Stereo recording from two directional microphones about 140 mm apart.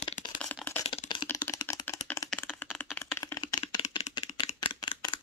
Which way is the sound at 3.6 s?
35° left (ahead or behind).